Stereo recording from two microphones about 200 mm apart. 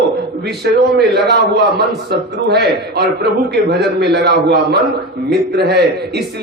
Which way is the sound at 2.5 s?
55° right (ahead or behind).